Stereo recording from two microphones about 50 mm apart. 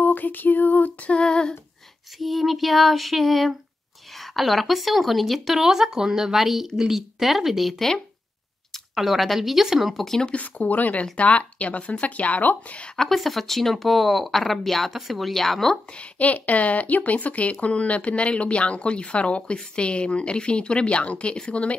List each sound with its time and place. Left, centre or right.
0.0 s music: left
1.0 s speech: left
2.1 s speech: centre
8.7 s speech: centre
10.2 s speech: left
13.1 s speech: centre
16.0 s speech: left